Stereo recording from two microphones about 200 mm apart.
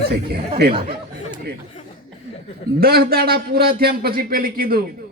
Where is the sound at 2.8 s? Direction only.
50° right (ahead or behind).